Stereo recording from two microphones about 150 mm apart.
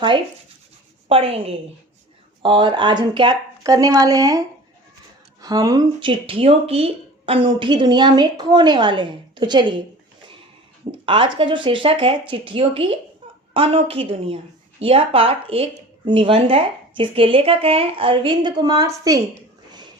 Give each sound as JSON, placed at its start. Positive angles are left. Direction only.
{"t": 1.0, "sound": "a woman's voice", "side_deg": -40}
{"t": 11.0, "sound": "a woman's voice", "side_deg": -35}